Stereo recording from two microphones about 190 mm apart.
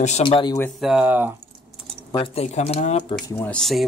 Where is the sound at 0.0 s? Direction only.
35° left (ahead or behind).